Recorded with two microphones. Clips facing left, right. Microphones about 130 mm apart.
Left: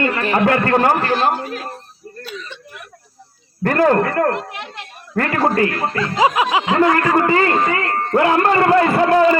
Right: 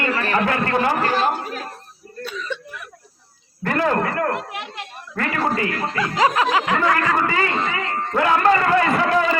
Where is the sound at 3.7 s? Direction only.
50° left (ahead or behind).